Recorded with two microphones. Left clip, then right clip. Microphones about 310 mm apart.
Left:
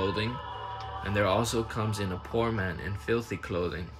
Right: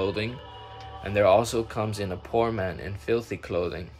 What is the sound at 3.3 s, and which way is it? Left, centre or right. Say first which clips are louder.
Speech: right 3 dB; centre.